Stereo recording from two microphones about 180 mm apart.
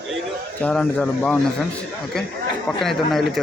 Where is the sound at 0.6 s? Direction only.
5° left (ahead or behind).